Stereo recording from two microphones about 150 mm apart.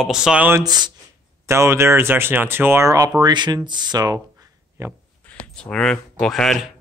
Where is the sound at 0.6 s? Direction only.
30° right (ahead or behind).